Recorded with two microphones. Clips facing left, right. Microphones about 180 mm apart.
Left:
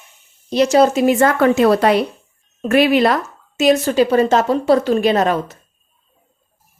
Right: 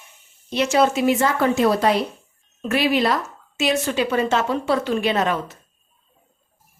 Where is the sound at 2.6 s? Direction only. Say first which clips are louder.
Left 6 dB; 50° left (ahead or behind).